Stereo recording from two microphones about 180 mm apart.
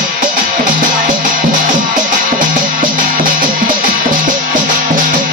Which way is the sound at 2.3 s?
50° right (ahead or behind).